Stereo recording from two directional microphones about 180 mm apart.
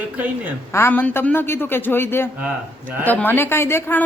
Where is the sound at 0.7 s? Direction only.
15° left (ahead or behind).